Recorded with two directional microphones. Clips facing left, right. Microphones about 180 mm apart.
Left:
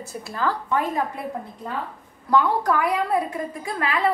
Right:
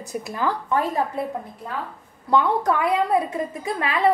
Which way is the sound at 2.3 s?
25° right (ahead or behind).